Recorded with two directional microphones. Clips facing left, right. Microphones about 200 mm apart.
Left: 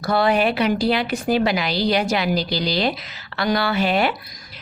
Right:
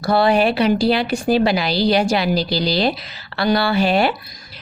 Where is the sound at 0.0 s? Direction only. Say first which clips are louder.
Right 3 dB; 30° right (ahead or behind).